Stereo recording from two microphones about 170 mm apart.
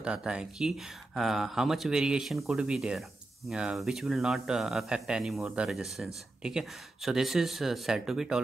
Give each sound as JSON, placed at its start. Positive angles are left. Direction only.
{"t": 0.0, "sound": "speech", "side_deg": -5}